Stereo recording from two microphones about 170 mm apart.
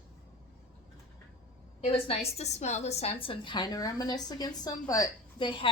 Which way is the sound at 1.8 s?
35° left (ahead or behind).